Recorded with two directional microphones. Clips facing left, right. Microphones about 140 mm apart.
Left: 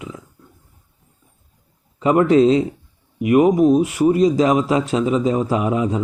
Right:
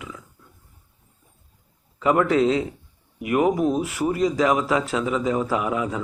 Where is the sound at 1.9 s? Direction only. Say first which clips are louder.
Left 5 dB; 25° left (ahead or behind).